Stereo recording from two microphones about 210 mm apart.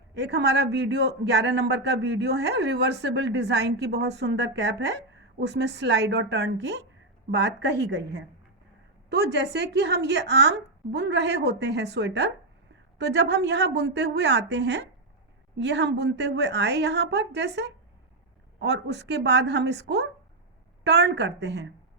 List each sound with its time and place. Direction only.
0.1 s a man's voice: 55° right (ahead or behind)